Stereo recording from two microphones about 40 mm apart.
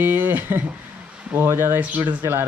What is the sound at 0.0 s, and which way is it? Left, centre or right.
Speech, right.